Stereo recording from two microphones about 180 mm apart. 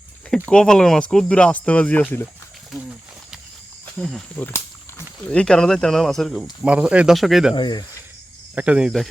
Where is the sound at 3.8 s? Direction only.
5° left (ahead or behind).